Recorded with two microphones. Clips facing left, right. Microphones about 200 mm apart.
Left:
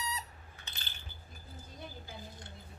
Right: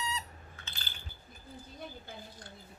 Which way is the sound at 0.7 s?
20° left (ahead or behind).